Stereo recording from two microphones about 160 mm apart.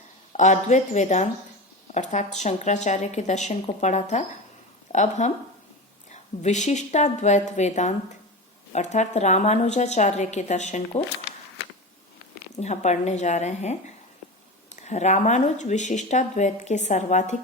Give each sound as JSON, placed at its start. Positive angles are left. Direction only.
{"t": 0.3, "sound": "speech", "side_deg": 50}
{"t": 12.5, "sound": "speech", "side_deg": 45}